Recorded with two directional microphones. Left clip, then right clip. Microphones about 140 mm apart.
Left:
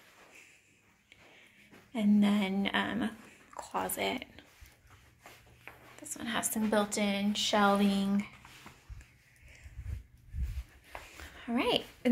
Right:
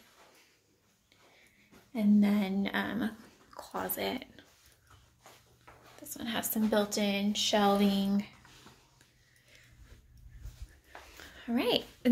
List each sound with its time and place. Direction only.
1.9 s speech: 15° right (ahead or behind)
6.0 s speech: 45° right (ahead or behind)
11.3 s a child's voice: 30° right (ahead or behind)